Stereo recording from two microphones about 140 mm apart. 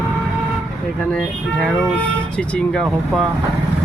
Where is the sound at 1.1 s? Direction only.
10° left (ahead or behind).